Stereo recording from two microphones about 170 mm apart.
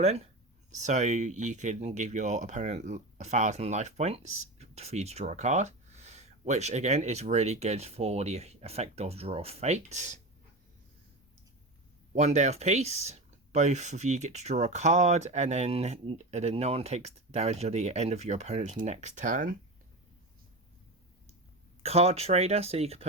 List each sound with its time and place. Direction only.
0.0 s speech: 35° right (ahead or behind)
12.1 s speech: 45° right (ahead or behind)
21.8 s speech: 40° right (ahead or behind)